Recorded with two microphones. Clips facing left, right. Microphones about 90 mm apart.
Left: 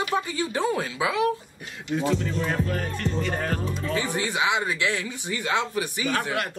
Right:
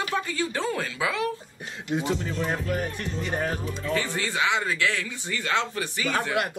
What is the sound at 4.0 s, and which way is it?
A man's voice, 15° left (ahead or behind).